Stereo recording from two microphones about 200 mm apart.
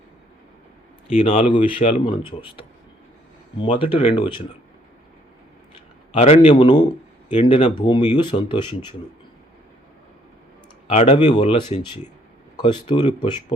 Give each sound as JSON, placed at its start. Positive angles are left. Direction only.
{"t": 1.1, "sound": "speech", "side_deg": 30}
{"t": 6.1, "sound": "speech", "side_deg": 30}
{"t": 10.8, "sound": "speech", "side_deg": 30}